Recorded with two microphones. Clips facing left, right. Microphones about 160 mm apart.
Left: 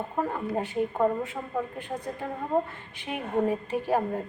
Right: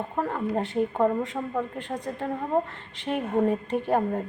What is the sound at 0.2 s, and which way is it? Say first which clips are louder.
A woman's voice: right 2 dB; 10° left (ahead or behind).